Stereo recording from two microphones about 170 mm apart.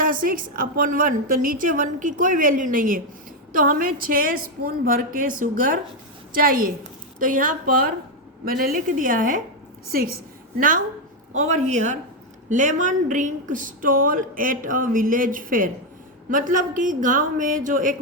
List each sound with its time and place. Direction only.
0.0 s a woman's voice: 55° right (ahead or behind)